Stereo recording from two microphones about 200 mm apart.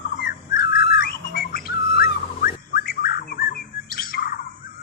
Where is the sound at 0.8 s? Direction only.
50° left (ahead or behind).